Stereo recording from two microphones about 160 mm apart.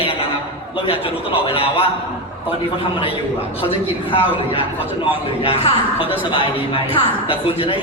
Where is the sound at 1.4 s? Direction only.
35° left (ahead or behind).